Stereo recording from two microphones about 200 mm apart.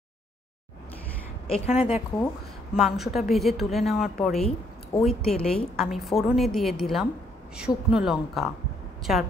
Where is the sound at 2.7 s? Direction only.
Centre (ahead or behind).